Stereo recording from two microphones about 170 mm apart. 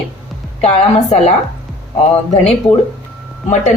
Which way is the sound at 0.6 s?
40° left (ahead or behind).